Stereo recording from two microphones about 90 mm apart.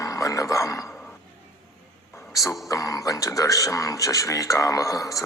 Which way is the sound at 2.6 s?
40° left (ahead or behind).